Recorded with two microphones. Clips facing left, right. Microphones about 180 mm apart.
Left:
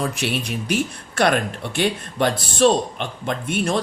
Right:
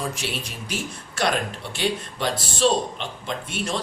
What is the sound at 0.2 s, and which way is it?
Speech, 60° left (ahead or behind).